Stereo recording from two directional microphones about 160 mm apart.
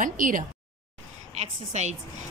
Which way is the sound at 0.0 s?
55° right (ahead or behind).